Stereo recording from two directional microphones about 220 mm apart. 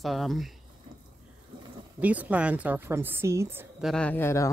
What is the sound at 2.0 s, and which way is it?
A woman's voice, 5° right (ahead or behind).